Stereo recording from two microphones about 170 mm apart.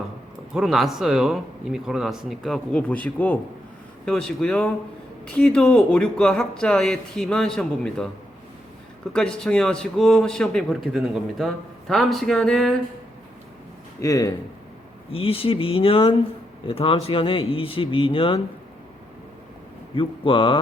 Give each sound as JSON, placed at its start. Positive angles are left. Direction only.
{"t": 0.5, "sound": "a man's voice", "side_deg": 0}
{"t": 9.1, "sound": "a man's voice", "side_deg": 5}
{"t": 14.0, "sound": "a man's voice", "side_deg": 20}
{"t": 15.1, "sound": "speech", "side_deg": 35}
{"t": 20.0, "sound": "a man's voice", "side_deg": 30}